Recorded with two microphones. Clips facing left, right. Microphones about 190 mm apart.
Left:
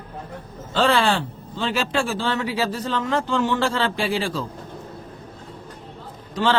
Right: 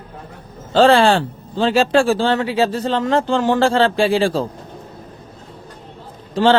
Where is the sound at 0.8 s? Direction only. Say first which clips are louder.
Right 6 dB; 30° right (ahead or behind).